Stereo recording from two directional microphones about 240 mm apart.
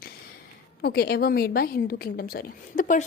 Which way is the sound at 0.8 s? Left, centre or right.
Left.